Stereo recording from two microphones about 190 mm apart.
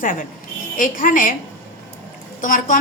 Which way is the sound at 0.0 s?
45° left (ahead or behind).